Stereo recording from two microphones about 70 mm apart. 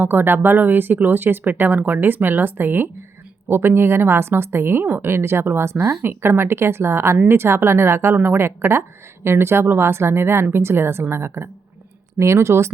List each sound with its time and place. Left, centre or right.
0.0 s a woman's voice: right